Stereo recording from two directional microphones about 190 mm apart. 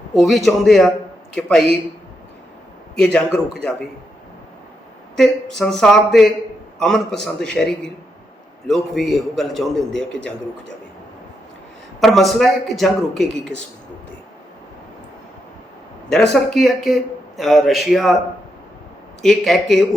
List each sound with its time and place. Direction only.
0.2 s speech: centre (ahead or behind)
2.9 s speech: 5° left (ahead or behind)
5.1 s speech: centre (ahead or behind)
11.9 s speech: centre (ahead or behind)
16.3 s speech: centre (ahead or behind)
19.2 s speech: centre (ahead or behind)